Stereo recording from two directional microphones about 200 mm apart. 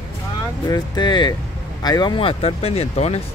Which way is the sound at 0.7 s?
20° left (ahead or behind).